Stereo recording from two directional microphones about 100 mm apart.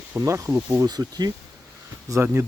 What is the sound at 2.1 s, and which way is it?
Speech, 25° right (ahead or behind).